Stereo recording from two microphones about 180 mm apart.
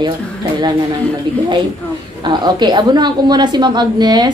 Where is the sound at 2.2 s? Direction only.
25° right (ahead or behind).